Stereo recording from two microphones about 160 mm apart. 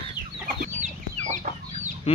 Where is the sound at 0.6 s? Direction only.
50° right (ahead or behind).